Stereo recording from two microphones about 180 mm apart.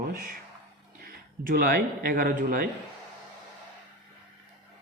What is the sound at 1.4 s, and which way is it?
Speech, 55° right (ahead or behind).